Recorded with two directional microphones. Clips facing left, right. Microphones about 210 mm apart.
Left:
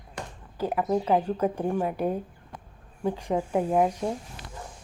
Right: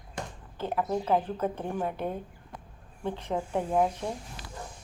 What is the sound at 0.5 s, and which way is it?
Speech, 10° left (ahead or behind).